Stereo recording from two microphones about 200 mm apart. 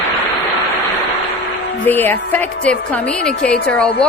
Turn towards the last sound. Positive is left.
turn(degrees=5)  # may be behind; listen again after turning